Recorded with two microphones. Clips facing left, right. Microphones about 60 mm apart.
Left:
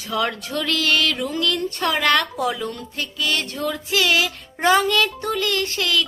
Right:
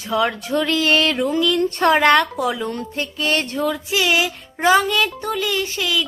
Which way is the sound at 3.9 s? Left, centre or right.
Centre.